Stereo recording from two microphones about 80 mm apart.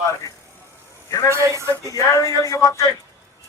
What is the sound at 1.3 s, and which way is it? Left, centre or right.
Speech, right.